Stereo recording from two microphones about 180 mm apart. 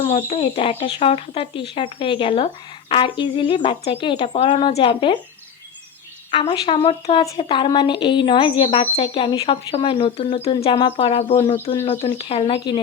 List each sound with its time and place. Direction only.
0.0 s speech: 35° left (ahead or behind)
6.3 s speech: 30° left (ahead or behind)